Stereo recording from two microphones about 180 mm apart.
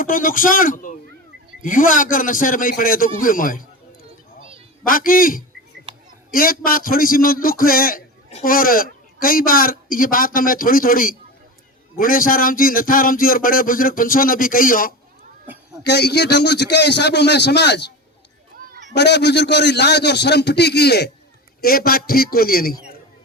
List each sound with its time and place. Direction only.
0.0 s speech: 50° left (ahead or behind)
4.9 s speech: 50° left (ahead or behind)
5.9 s a sound: 30° right (ahead or behind)
6.3 s speech: 50° left (ahead or behind)
15.8 s a man's voice: 65° left (ahead or behind)
18.7 s a sound: 80° right
18.9 s a man's voice: 70° left (ahead or behind)